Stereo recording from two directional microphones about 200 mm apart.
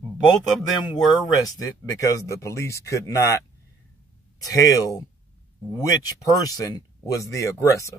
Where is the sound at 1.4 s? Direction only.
15° left (ahead or behind).